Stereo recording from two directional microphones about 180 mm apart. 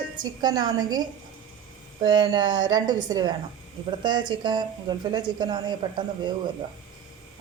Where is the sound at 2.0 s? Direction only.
25° right (ahead or behind).